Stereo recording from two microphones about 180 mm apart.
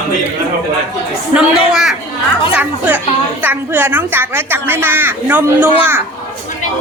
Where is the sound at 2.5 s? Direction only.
10° right (ahead or behind).